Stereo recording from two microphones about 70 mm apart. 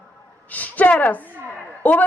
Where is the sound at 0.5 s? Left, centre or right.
Left.